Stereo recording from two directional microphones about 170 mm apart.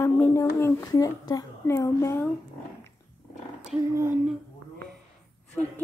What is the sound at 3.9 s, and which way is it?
Speech, 15° right (ahead or behind).